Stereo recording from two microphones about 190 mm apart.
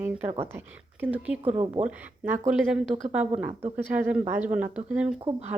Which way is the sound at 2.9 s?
30° right (ahead or behind).